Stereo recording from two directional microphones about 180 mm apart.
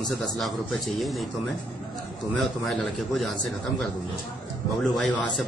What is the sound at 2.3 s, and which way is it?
Speech, centre (ahead or behind).